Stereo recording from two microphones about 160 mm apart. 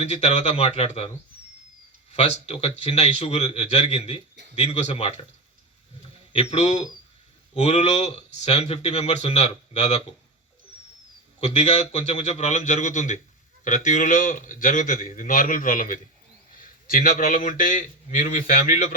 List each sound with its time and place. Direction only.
0.0 s speech: 40° left (ahead or behind)
2.1 s speech: 40° left (ahead or behind)
6.3 s speech: 40° left (ahead or behind)
11.3 s a man's voice: 40° left (ahead or behind)